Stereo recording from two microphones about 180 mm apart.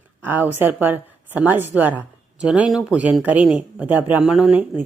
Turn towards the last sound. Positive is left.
turn(degrees=-10)  # may be behind; listen again after turning